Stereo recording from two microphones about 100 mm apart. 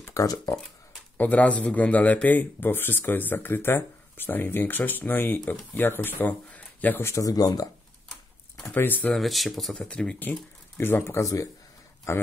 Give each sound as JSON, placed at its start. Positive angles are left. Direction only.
{"t": 0.0, "sound": "speech", "side_deg": 35}
{"t": 1.1, "sound": "speech", "side_deg": 15}
{"t": 8.7, "sound": "speech", "side_deg": 20}
{"t": 9.1, "sound": "speech", "side_deg": 0}